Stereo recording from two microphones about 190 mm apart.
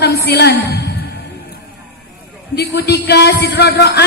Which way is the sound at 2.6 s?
60° left (ahead or behind).